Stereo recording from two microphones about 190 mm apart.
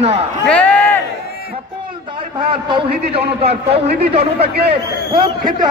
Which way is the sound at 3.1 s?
30° right (ahead or behind).